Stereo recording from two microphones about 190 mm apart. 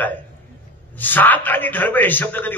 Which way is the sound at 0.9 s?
10° left (ahead or behind).